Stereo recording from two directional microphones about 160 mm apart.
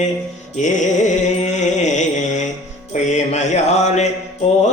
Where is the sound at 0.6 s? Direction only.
50° left (ahead or behind).